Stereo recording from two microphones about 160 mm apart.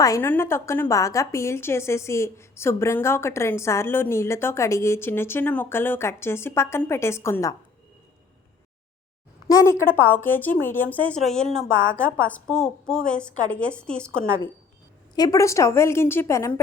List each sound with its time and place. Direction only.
0.0 s a woman's voice: 15° left (ahead or behind)
9.5 s a woman's voice: 20° left (ahead or behind)
15.1 s a woman's voice: 25° left (ahead or behind)